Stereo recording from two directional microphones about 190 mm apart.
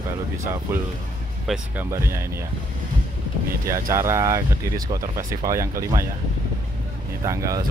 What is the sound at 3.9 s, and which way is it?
Speech, 15° right (ahead or behind).